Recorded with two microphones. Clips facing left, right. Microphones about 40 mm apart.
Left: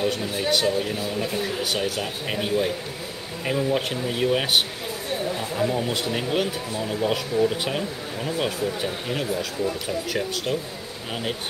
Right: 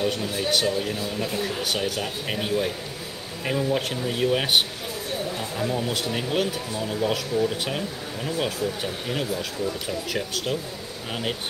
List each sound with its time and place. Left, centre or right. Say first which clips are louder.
0.0 s speech: left 1 dB; centre
5.4 s speech: left 2 dB; centre
8.5 s speech: left 1 dB; centre
9.8 s speech: left 2 dB; centre